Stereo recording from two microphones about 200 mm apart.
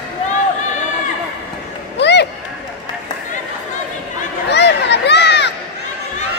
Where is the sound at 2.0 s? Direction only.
60° left (ahead or behind).